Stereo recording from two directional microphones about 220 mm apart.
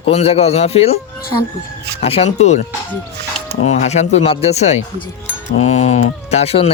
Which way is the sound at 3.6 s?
30° left (ahead or behind).